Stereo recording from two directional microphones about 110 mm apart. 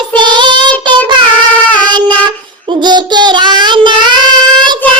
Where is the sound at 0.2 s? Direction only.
45° right (ahead or behind).